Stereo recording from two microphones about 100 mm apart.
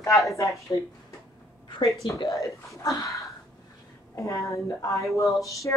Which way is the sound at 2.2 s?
30° left (ahead or behind).